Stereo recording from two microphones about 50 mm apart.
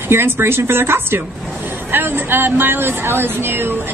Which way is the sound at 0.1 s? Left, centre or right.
Right.